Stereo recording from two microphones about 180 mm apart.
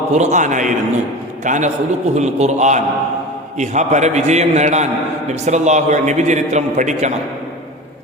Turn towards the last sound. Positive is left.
turn(degrees=-40)  # may be behind; listen again after turning